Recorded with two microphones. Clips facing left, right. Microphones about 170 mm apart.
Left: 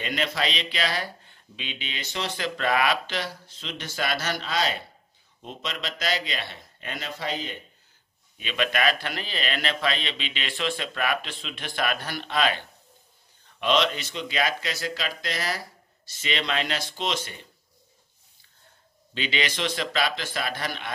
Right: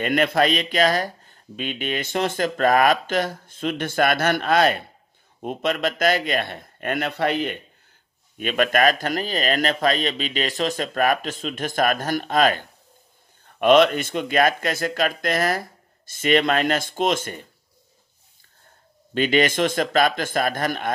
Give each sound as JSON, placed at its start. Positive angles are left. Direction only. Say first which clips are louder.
{"t": 0.0, "sound": "speech", "louder": "right 9 dB", "side_deg": -55}
{"t": 8.4, "sound": "speech", "louder": "right 7 dB", "side_deg": -50}
{"t": 19.1, "sound": "speech", "louder": "right 10 dB", "side_deg": -50}